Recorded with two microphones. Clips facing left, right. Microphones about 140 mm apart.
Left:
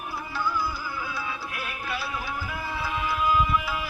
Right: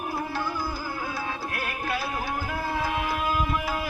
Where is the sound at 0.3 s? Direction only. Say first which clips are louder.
Left 1 dB; 45° right (ahead or behind).